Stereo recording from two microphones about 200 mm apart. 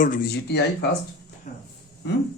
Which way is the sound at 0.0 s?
45° left (ahead or behind).